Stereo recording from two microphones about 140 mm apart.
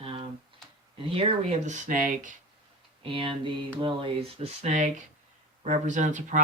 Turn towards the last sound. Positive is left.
turn(degrees=-60)  # may be behind; listen again after turning